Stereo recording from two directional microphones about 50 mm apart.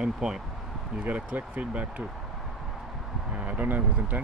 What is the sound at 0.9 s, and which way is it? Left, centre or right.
Speech, right.